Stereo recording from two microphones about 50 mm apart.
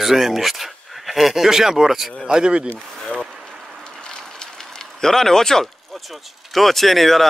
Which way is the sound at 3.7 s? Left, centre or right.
Centre.